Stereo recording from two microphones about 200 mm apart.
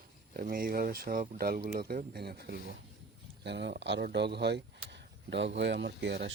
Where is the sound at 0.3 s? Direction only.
45° right (ahead or behind).